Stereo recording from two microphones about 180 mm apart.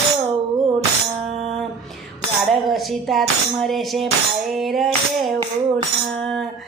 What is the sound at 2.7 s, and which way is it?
Speech, centre (ahead or behind).